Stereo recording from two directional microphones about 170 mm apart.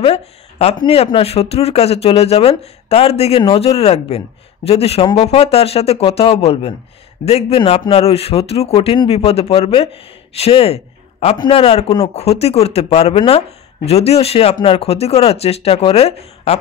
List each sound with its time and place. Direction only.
0.0 s a man's voice: 35° left (ahead or behind)